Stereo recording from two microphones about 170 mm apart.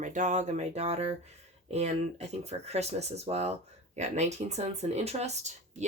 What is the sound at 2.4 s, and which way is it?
Speech, 40° right (ahead or behind).